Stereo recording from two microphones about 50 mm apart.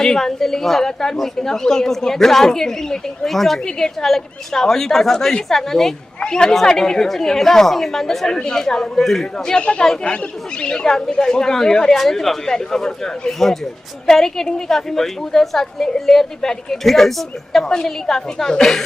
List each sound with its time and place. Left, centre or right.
0.0 s speech: centre
9.5 s speech: left